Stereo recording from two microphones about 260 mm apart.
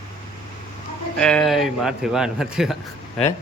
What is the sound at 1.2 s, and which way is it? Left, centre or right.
Speech, centre.